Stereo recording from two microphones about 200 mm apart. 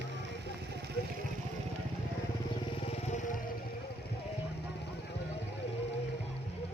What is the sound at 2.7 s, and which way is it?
Vehicle, 30° left (ahead or behind).